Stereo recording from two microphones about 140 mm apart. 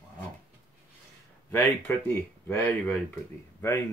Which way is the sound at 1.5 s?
15° left (ahead or behind).